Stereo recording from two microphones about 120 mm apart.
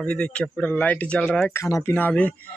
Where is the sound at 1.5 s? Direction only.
25° left (ahead or behind).